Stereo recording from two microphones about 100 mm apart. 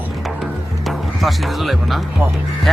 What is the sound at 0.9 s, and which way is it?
Speech, centre (ahead or behind).